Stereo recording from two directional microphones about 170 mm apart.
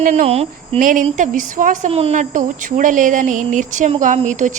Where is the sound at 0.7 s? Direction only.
50° right (ahead or behind).